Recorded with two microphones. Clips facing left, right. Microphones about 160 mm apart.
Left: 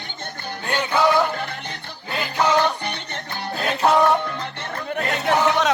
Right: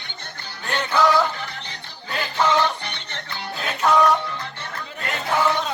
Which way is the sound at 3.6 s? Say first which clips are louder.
Left 1 dB; 35° left (ahead or behind).